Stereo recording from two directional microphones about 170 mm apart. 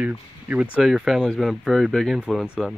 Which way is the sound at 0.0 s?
10° right (ahead or behind).